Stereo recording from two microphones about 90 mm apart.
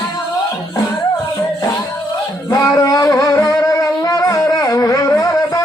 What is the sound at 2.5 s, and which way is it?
Music, 40° left (ahead or behind).